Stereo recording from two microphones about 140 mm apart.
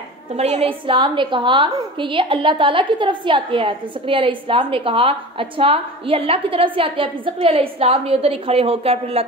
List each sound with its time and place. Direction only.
0.4 s a woman's voice: 45° right (ahead or behind)